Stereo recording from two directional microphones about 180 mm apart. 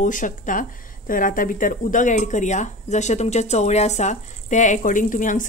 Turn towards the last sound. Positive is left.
turn(degrees=45)  # may be behind; listen again after turning